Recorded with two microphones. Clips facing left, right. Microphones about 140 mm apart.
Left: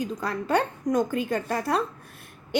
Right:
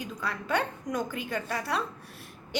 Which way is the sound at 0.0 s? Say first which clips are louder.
Left 6 dB; 40° left (ahead or behind).